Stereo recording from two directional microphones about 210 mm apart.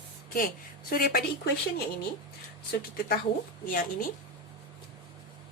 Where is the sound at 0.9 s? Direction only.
45° left (ahead or behind).